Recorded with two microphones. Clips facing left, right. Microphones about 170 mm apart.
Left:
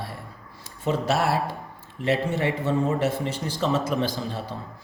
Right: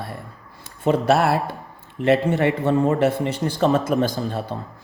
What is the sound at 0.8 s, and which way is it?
A man's voice, 60° right (ahead or behind).